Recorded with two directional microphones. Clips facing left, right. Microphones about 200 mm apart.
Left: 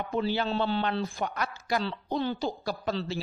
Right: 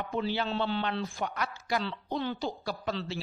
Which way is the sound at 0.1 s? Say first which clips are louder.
Left 3 dB; 40° left (ahead or behind).